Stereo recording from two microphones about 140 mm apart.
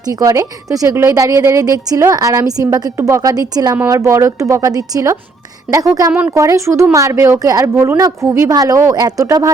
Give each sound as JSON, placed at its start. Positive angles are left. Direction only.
{"t": 0.1, "sound": "a woman's voice", "side_deg": -25}
{"t": 6.1, "sound": "speech", "side_deg": -10}
{"t": 6.3, "sound": "a woman's voice", "side_deg": -20}